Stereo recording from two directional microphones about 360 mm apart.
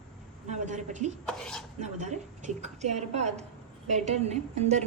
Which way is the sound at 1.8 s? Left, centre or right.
Centre.